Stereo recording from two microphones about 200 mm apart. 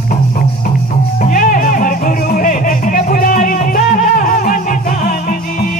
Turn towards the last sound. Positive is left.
turn(degrees=45)  # may be behind; listen again after turning